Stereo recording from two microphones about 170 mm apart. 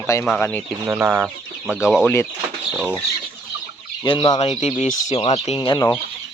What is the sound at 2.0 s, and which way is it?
Speech, 15° left (ahead or behind).